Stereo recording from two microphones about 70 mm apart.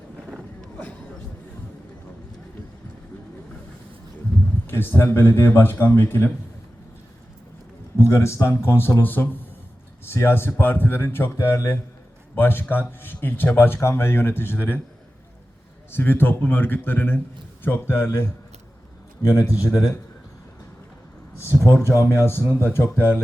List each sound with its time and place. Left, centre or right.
0.3 s a sound: centre
4.6 s speech: left
7.9 s a man's voice: left
15.9 s a man's voice: left
21.5 s speech: centre
21.8 s speech: left